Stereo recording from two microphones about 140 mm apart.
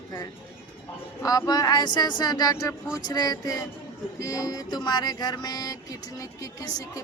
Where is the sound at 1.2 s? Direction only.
25° left (ahead or behind).